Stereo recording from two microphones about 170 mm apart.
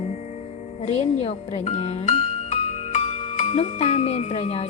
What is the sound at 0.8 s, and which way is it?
Speech, 40° left (ahead or behind).